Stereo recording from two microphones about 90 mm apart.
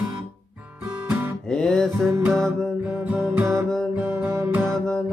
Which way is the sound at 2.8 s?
15° right (ahead or behind).